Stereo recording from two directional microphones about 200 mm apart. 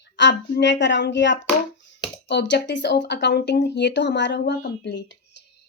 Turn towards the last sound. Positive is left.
turn(degrees=60)  # may be behind; listen again after turning